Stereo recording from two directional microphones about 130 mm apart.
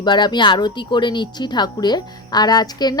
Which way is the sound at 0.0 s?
35° left (ahead or behind).